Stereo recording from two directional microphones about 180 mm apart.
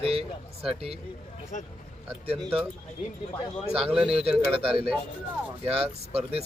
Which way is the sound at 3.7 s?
5° right (ahead or behind).